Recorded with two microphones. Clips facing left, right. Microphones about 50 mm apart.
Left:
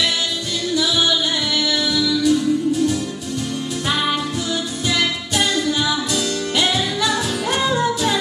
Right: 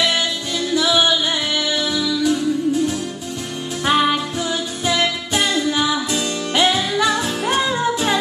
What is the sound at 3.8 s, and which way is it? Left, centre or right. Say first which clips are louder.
Music: right 5 dB; right.